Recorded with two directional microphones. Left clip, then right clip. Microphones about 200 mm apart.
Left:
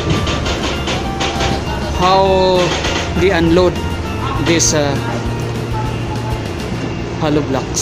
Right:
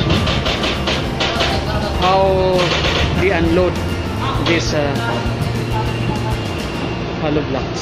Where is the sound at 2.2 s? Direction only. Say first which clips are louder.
Left 3 dB; 30° left (ahead or behind).